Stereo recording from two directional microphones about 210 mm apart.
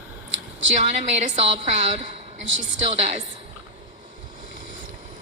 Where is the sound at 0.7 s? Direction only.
35° right (ahead or behind).